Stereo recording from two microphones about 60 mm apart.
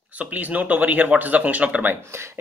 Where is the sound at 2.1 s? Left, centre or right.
Right.